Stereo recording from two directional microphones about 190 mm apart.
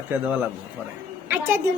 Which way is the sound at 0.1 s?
10° right (ahead or behind).